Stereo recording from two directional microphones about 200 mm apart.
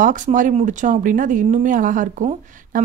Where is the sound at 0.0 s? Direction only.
40° right (ahead or behind).